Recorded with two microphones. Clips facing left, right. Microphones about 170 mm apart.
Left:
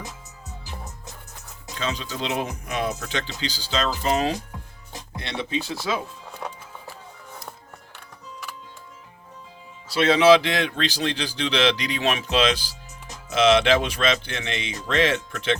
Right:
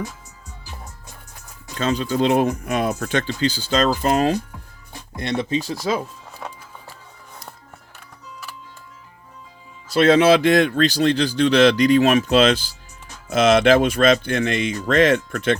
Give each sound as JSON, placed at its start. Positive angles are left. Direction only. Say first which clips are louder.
{"t": 1.8, "sound": "speech", "louder": "right 9 dB", "side_deg": -50}
{"t": 6.4, "sound": "music", "louder": "even", "side_deg": 5}
{"t": 9.9, "sound": "speech", "louder": "right 2 dB", "side_deg": -50}